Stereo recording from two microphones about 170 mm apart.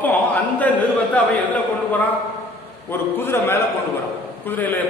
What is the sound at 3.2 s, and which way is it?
A man's voice, 15° left (ahead or behind).